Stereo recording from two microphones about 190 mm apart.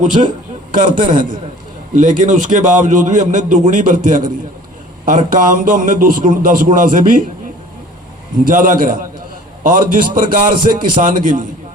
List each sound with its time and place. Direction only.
0.7 s a man's voice: 45° right (ahead or behind)
8.4 s a man's voice: 45° right (ahead or behind)